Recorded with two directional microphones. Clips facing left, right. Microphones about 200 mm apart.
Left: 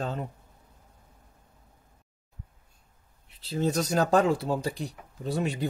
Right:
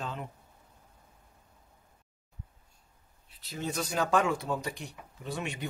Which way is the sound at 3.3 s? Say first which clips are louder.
Left 8 dB; 30° left (ahead or behind).